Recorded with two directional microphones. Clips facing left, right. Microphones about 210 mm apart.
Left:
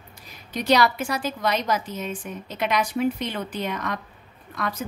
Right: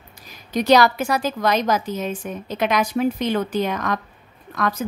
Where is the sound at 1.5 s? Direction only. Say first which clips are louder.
Right 5 dB; 90° right.